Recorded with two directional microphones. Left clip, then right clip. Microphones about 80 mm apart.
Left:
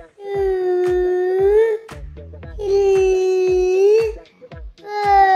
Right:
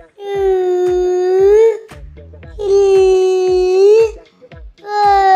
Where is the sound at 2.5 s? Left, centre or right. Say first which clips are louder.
Right 5 dB; right.